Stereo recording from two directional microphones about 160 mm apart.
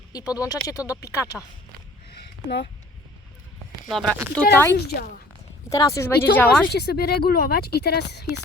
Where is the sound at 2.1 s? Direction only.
90° left.